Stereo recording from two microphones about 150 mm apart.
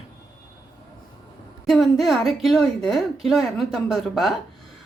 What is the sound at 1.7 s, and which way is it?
A woman's voice, centre (ahead or behind).